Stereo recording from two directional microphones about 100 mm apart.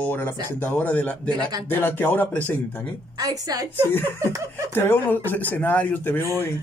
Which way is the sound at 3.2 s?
40° right (ahead or behind).